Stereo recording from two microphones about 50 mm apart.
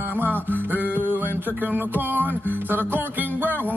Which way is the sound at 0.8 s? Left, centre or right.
Right.